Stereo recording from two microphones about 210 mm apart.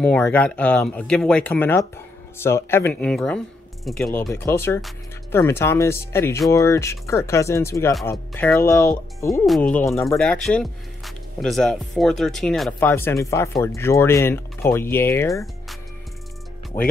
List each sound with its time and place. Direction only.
0.0 s speech: 5° left (ahead or behind)
12.9 s speech: 15° left (ahead or behind)
16.7 s speech: 40° left (ahead or behind)